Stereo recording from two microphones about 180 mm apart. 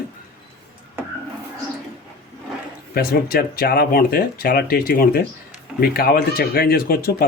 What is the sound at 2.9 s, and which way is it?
Speech, 55° left (ahead or behind).